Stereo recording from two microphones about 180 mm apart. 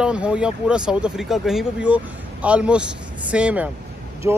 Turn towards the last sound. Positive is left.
turn(degrees=-15)  # may be behind; listen again after turning